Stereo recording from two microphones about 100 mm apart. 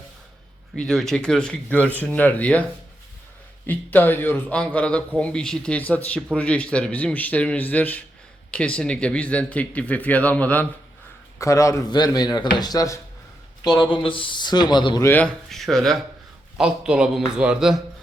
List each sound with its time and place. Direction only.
0.8 s speech: 5° left (ahead or behind)
3.7 s a man's voice: 20° left (ahead or behind)
11.3 s a man's voice: 30° left (ahead or behind)
11.9 s speech: 45° left (ahead or behind)
13.9 s speech: 60° left (ahead or behind)
15.2 s speech: 5° left (ahead or behind)
16.6 s a man's voice: 10° right (ahead or behind)